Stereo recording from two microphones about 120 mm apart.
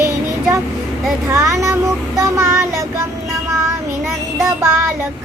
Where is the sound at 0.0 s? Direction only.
20° right (ahead or behind).